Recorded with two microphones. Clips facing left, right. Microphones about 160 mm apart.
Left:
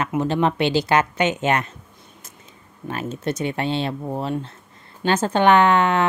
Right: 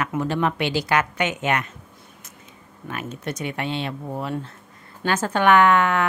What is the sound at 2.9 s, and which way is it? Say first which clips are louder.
A woman's voice: left 5 dB; 30° left (ahead or behind).